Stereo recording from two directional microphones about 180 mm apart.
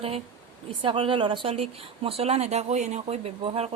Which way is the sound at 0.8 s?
30° right (ahead or behind).